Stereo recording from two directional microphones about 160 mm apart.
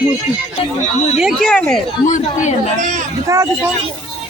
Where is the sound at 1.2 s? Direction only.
Centre (ahead or behind).